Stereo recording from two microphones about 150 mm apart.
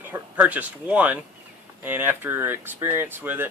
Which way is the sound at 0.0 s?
10° right (ahead or behind).